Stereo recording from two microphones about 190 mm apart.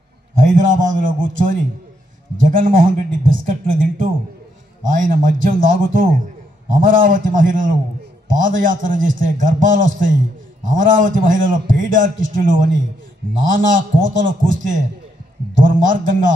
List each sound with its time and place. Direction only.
0.6 s a man's voice: 45° right (ahead or behind)
2.4 s a man's voice: 45° right (ahead or behind)
15.6 s a man's voice: 45° right (ahead or behind)